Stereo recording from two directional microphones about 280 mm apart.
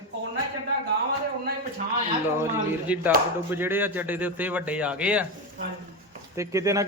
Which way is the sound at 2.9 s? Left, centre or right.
Centre.